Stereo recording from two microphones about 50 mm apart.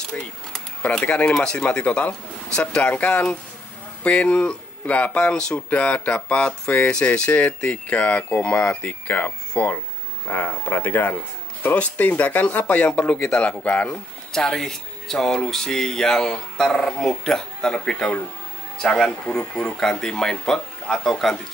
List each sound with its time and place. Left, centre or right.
0.1 s speech: left
13.8 s speech: centre